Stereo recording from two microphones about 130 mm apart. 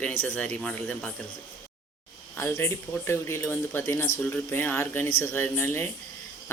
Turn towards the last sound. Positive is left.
turn(degrees=15)  # may be behind; listen again after turning